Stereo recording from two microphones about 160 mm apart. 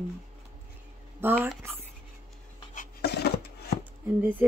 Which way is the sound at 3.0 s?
90° left.